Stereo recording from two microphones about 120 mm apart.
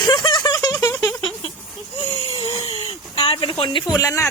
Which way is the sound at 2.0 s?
50° left (ahead or behind).